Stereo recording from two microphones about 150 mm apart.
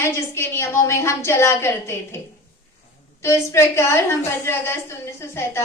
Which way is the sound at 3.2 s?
20° left (ahead or behind).